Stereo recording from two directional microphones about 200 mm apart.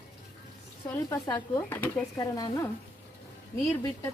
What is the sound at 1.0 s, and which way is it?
Speech, 20° left (ahead or behind).